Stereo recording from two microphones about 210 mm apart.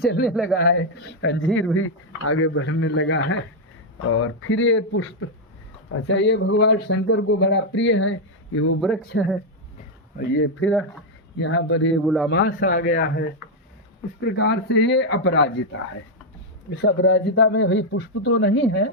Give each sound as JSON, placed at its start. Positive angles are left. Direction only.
{"t": 0.0, "sound": "speech", "side_deg": 50}
{"t": 0.3, "sound": "a man's voice", "side_deg": 0}
{"t": 0.6, "sound": "speech", "side_deg": 50}
{"t": 1.7, "sound": "speech", "side_deg": 75}
{"t": 4.0, "sound": "speech", "side_deg": 75}
{"t": 9.1, "sound": "speech", "side_deg": 55}
{"t": 12.0, "sound": "a man's voice", "side_deg": 0}
{"t": 12.3, "sound": "speech", "side_deg": 45}